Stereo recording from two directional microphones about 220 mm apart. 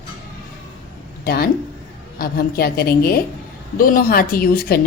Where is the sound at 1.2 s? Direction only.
45° left (ahead or behind).